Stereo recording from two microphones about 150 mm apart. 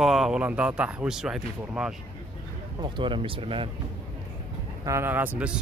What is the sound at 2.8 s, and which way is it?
Speech, 35° right (ahead or behind).